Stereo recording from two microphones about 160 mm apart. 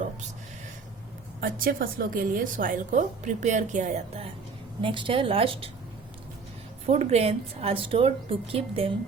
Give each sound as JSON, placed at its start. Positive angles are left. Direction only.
{"t": 1.4, "sound": "a woman's voice", "side_deg": -60}
{"t": 4.8, "sound": "a woman's voice", "side_deg": -30}
{"t": 6.8, "sound": "a woman's voice", "side_deg": -45}